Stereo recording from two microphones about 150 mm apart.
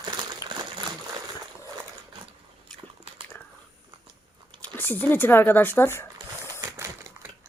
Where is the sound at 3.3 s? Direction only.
10° left (ahead or behind).